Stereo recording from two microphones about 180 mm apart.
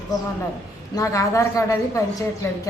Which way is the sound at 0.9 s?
15° left (ahead or behind).